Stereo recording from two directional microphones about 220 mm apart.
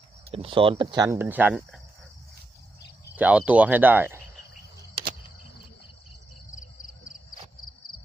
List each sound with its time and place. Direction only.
0.3 s speech: 25° right (ahead or behind); by 1.8 s 5° right (ahead or behind)
3.2 s speech: 5° right (ahead or behind)